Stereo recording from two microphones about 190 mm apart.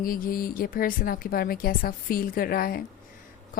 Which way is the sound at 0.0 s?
50° left (ahead or behind).